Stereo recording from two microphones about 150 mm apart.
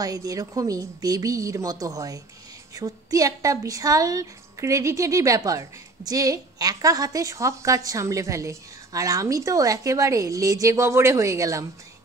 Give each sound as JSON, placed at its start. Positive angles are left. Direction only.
{"t": 0.0, "sound": "a woman's voice", "side_deg": -25}